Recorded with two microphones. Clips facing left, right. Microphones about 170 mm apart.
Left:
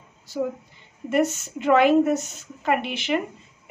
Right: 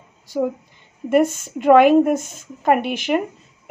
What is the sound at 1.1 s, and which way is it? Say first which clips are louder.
Speech: right 5 dB; 50° right (ahead or behind).